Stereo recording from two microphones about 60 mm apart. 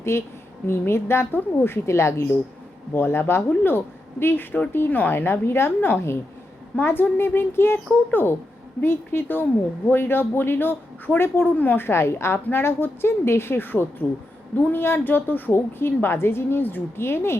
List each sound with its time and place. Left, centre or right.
0.0 s a woman's voice: left
2.9 s speech: left